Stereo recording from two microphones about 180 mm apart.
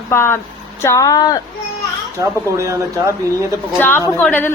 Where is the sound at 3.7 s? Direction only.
10° left (ahead or behind).